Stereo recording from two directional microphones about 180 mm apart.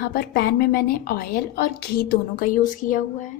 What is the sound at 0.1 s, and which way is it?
A woman's voice, 60° left (ahead or behind).